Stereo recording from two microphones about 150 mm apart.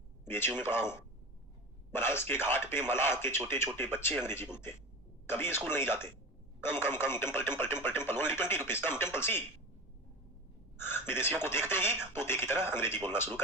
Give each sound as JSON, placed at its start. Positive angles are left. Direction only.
{"t": 0.3, "sound": "speech", "side_deg": 15}
{"t": 10.8, "sound": "a man's voice", "side_deg": 15}